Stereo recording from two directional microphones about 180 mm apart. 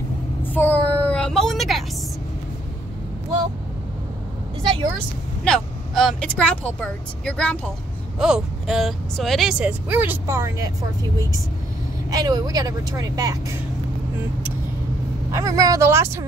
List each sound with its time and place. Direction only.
0.5 s a sound: 10° left (ahead or behind)
5.4 s speech: centre (ahead or behind); by 10.7 s 15° right (ahead or behind)
12.1 s speech: 20° right (ahead or behind)
15.3 s speech: 20° right (ahead or behind)